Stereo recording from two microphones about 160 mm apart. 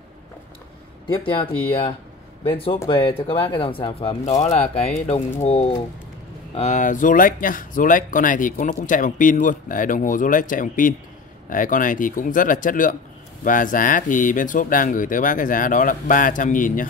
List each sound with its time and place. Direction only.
1.7 s speech: 35° left (ahead or behind); by 16.8 s 55° left (ahead or behind)